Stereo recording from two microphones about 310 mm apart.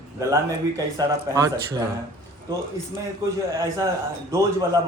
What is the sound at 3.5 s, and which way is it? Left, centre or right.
Speech, centre.